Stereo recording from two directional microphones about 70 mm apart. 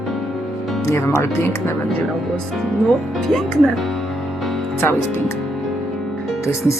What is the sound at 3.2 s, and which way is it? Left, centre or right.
Speech, centre.